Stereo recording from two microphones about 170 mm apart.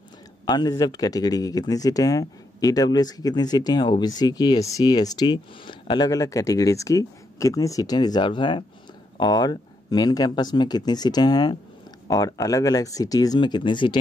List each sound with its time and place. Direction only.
0.5 s speech: 25° left (ahead or behind)